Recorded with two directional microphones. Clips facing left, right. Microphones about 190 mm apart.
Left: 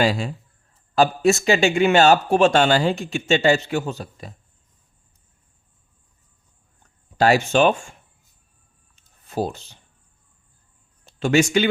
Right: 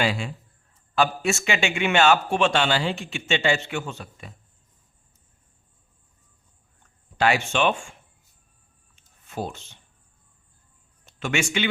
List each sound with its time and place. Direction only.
0.0 s a man's voice: 40° left (ahead or behind)
7.2 s a man's voice: 40° left (ahead or behind)
9.0 s a sound: 35° left (ahead or behind)
11.0 s speech: 35° left (ahead or behind)